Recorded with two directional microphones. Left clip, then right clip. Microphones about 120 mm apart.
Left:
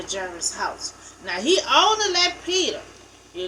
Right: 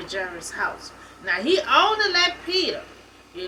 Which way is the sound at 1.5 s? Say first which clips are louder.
Left 1 dB; 25° left (ahead or behind).